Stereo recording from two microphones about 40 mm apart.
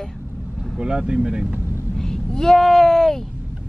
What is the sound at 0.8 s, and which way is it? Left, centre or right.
Speech, centre.